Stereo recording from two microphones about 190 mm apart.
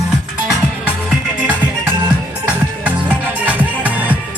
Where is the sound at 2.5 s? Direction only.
5° right (ahead or behind).